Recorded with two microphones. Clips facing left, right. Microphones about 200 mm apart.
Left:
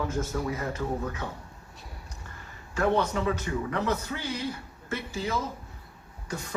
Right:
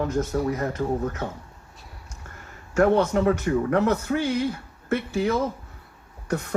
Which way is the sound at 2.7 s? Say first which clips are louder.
Right 6 dB; 50° right (ahead or behind).